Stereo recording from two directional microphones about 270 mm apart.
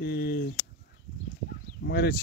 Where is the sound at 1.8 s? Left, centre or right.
Left.